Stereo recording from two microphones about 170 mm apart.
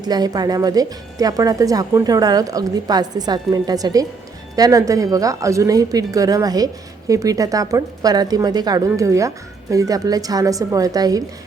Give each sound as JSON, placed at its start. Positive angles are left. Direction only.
{"t": 0.0, "sound": "speech", "side_deg": -25}